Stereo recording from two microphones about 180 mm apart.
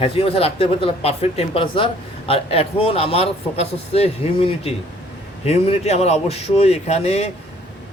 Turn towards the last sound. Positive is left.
turn(degrees=35)  # may be behind; listen again after turning